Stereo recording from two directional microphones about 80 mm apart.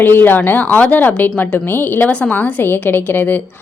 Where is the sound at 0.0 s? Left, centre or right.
Left.